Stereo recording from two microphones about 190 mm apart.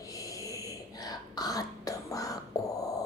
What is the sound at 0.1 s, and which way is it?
Throat clearing, 15° left (ahead or behind).